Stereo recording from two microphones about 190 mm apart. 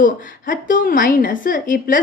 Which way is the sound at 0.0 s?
45° left (ahead or behind).